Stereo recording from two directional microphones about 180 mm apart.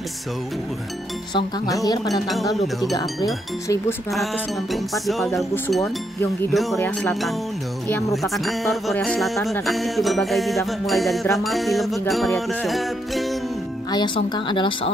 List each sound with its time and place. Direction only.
1.3 s speech: 20° left (ahead or behind)
2.2 s speech: centre (ahead or behind)
2.9 s speech: 20° left (ahead or behind)
4.9 s speech: centre (ahead or behind)
6.5 s speech: centre (ahead or behind)
6.8 s music: 10° left (ahead or behind)
7.9 s speech: centre (ahead or behind)
13.9 s speech: 25° left (ahead or behind)